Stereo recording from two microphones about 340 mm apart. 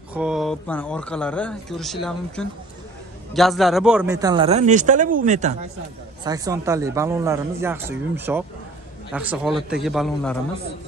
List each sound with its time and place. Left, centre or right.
0.1 s a man's voice: centre; by 5.6 s right
6.2 s a man's voice: centre